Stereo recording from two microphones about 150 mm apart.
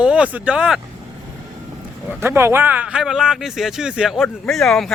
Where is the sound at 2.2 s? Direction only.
15° right (ahead or behind).